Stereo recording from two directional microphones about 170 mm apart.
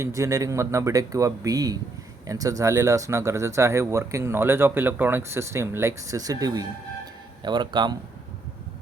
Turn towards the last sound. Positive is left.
turn(degrees=-25)  # may be behind; listen again after turning